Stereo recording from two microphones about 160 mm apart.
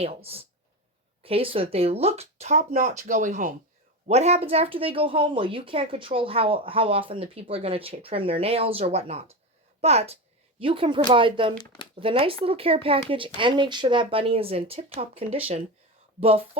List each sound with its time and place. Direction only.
0.0 s speech: 35° right (ahead or behind); by 3.5 s 55° right (ahead or behind)
4.1 s speech: 40° right (ahead or behind)